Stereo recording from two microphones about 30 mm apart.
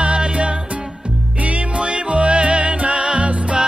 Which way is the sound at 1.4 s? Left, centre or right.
Right.